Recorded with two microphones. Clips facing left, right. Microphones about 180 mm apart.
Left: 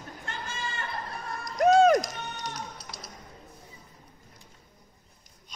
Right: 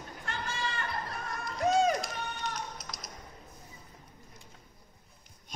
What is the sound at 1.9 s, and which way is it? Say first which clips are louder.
Run: left 7 dB; 40° left (ahead or behind).